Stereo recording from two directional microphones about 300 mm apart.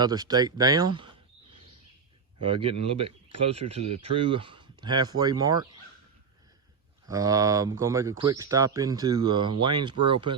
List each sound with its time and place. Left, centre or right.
0.0 s speech: centre
2.4 s speech: centre
7.1 s speech: centre